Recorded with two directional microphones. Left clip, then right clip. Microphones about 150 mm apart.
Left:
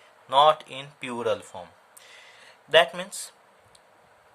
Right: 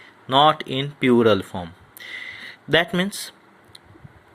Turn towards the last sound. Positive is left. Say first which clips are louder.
# right 7 dB
turn(degrees=-30)  # may be behind; listen again after turning